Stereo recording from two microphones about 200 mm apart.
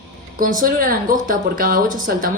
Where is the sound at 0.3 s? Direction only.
45° right (ahead or behind).